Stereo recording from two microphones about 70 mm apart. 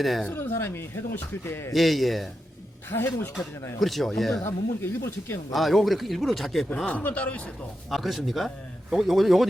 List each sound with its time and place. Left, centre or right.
0.0 s speech: centre
0.3 s speech: left
1.7 s speech: centre
2.9 s speech: left
3.8 s speech: centre
4.4 s speech: left
5.5 s speech: centre
6.8 s a man's voice: left
7.9 s speech: centre